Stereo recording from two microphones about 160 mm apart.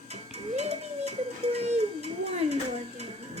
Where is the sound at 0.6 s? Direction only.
40° right (ahead or behind).